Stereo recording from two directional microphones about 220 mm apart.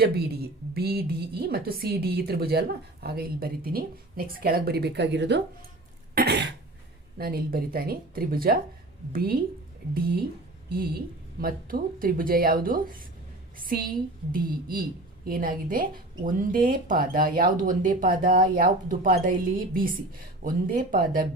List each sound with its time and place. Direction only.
0.7 s a woman's voice: 45° right (ahead or behind)